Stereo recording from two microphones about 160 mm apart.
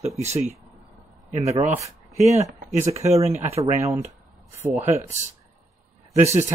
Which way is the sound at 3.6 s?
15° right (ahead or behind).